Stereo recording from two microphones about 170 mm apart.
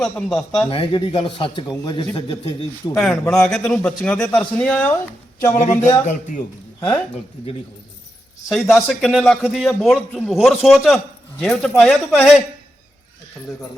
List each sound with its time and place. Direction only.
0.0 s a man's voice: 5° left (ahead or behind)
0.7 s a man's voice: 30° left (ahead or behind)
2.9 s a man's voice: 5° left (ahead or behind)
5.5 s speech: 45° left (ahead or behind)
6.7 s speech: 15° left (ahead or behind)
8.4 s a man's voice: centre (ahead or behind)